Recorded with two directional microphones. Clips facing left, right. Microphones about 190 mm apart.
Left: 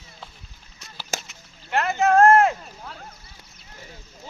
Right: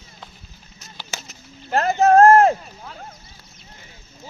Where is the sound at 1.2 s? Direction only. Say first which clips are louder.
Right 6 dB; 35° right (ahead or behind).